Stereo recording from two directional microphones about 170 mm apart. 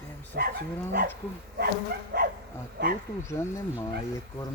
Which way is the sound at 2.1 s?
75° right (ahead or behind).